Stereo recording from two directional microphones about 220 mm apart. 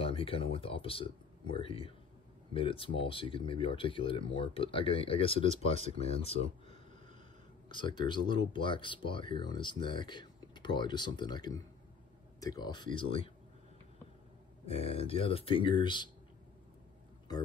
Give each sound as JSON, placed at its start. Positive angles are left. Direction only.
{"t": 0.0, "sound": "speech", "side_deg": 25}
{"t": 14.7, "sound": "speech", "side_deg": 25}